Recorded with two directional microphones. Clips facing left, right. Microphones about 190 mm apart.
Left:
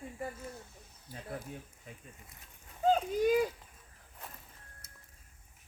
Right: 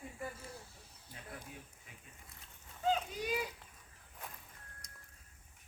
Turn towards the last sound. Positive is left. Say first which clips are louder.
# even
turn(degrees=5)  # may be behind; listen again after turning